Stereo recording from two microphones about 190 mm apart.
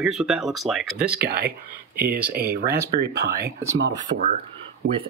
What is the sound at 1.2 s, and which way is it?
Speech, 55° right (ahead or behind).